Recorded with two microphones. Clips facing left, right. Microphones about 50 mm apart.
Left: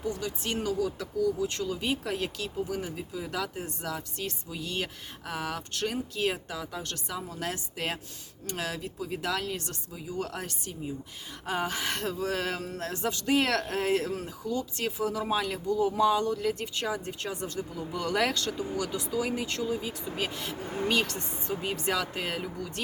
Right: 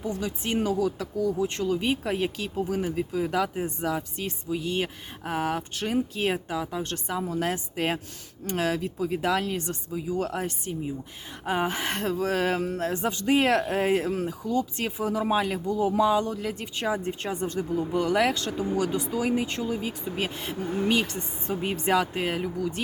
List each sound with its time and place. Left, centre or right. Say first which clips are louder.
0.0 s speech: right 2 dB; right
5.7 s speech: right 4 dB; centre
9.0 s speech: right 5 dB; centre; by 14.8 s right
14.8 s speech: right 3 dB; right
17.0 s speech: right 5 dB; right
18.0 s speech: right 1 dB; centre
18.5 s speech: right 6 dB; right
19.6 s speech: right 2 dB; right
20.8 s speech: right 2 dB; centre
21.4 s speech: right 4 dB; right